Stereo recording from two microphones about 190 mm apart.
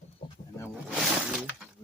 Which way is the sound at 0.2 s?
35° left (ahead or behind).